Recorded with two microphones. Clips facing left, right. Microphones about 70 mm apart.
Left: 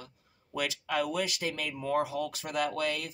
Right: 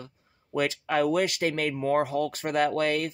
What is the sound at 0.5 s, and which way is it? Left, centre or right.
Speech, right.